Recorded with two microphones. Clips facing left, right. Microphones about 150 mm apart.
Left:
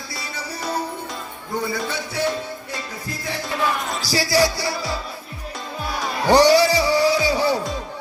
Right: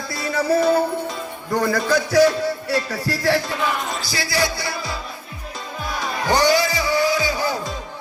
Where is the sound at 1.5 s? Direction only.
90° right.